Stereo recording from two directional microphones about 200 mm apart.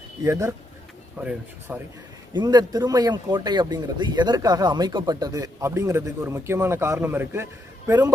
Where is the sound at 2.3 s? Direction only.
20° right (ahead or behind).